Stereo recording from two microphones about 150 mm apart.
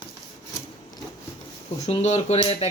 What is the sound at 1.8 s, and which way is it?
Speech, 45° left (ahead or behind).